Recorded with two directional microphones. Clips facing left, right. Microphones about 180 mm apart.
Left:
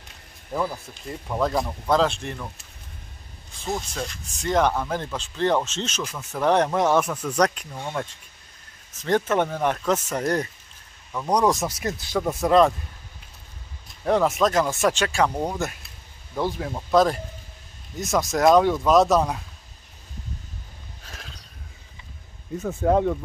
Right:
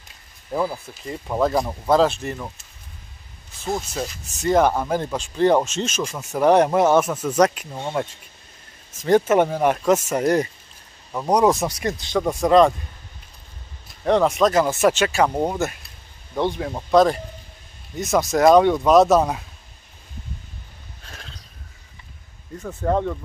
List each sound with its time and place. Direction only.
0.5 s speech: 10° right (ahead or behind)
3.6 s speech: 5° right (ahead or behind)
11.1 s speech: 25° right (ahead or behind)
11.3 s speech: 5° right (ahead or behind)
14.0 s speech: 5° left (ahead or behind)
21.0 s a sound: centre (ahead or behind)
22.6 s speech: 5° left (ahead or behind)